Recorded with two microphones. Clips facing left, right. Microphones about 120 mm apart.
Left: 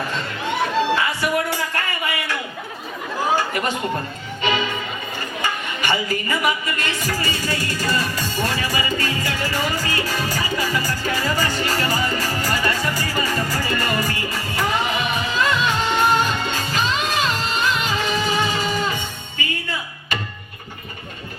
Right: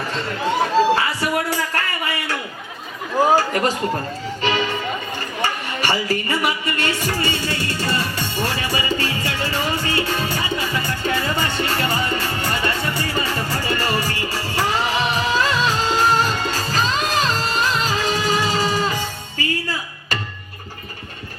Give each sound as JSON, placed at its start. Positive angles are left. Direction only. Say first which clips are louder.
{"t": 0.1, "sound": "a sound", "louder": "right 3 dB", "side_deg": -35}
{"t": 3.3, "sound": "speech", "louder": "right 4 dB", "side_deg": -35}
{"t": 5.4, "sound": "music", "louder": "right 2 dB", "side_deg": -30}